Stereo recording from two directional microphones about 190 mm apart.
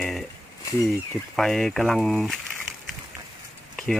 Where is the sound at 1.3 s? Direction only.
Centre (ahead or behind).